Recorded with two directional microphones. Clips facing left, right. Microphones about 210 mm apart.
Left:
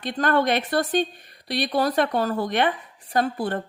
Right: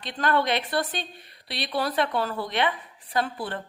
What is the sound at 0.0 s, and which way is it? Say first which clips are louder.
A woman's voice: left 3 dB; 45° left (ahead or behind).